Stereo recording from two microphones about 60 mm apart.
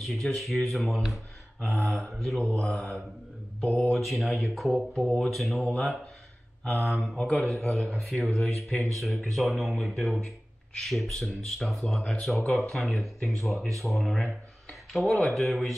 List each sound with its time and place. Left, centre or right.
0.0 s speech: centre
2.4 s speech: left
2.7 s speech: centre